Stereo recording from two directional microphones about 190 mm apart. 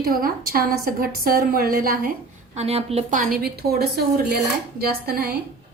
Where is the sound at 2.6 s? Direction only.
35° right (ahead or behind); by 5.4 s 55° right (ahead or behind).